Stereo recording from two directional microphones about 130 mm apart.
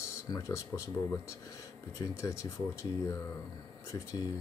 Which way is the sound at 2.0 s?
25° left (ahead or behind).